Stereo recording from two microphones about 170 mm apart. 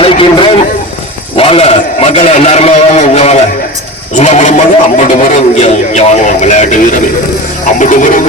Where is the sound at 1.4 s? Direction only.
35° left (ahead or behind).